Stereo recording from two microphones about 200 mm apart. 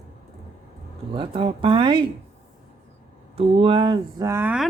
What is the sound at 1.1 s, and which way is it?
Speech, 25° right (ahead or behind).